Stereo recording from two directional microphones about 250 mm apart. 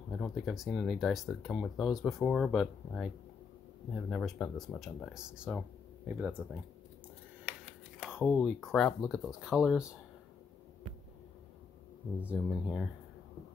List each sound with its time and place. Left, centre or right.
0.1 s speech: centre
8.0 s speech: centre
12.2 s speech: centre